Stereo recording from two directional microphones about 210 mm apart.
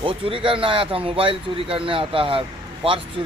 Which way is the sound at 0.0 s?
25° right (ahead or behind).